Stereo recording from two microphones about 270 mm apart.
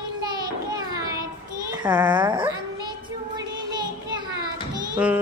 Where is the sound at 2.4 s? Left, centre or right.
Centre.